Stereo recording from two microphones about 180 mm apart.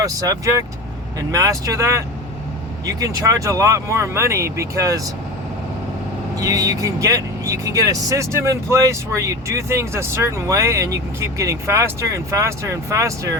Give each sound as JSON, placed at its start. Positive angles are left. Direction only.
{"t": 0.0, "sound": "speech", "side_deg": -20}
{"t": 6.3, "sound": "speech", "side_deg": -20}